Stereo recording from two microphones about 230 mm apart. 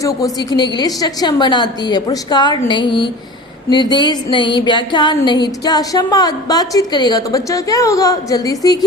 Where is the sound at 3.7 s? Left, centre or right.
Centre.